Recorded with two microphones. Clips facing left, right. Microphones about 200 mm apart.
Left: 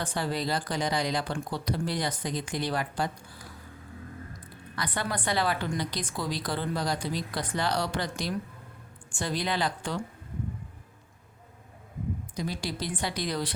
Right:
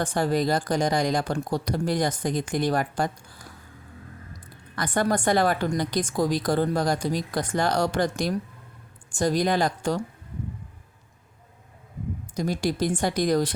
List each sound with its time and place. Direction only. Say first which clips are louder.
0.0 s a woman's voice: right 7 dB; 45° right (ahead or behind)
4.7 s a woman's voice: right 8 dB; 45° right (ahead or behind)
12.4 s a woman's voice: right 9 dB; 45° right (ahead or behind)